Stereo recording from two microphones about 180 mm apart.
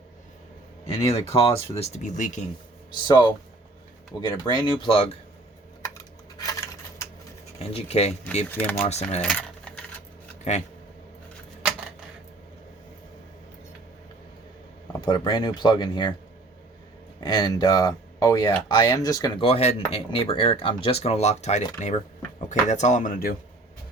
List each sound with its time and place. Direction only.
0.9 s speech: 15° left (ahead or behind)
1.7 s speech: 40° left (ahead or behind)
2.9 s speech: 25° left (ahead or behind)
6.3 s coin: 20° left (ahead or behind)
7.6 s speech: 35° left (ahead or behind)
8.4 s speech: 10° left (ahead or behind)
8.8 s speech: 35° left (ahead or behind)
9.2 s keys jangling: 5° left (ahead or behind)
10.5 s speech: 40° left (ahead or behind)
15.0 s speech: 25° left (ahead or behind)
17.2 s speech: 20° left (ahead or behind); by 23.3 s 45° left (ahead or behind)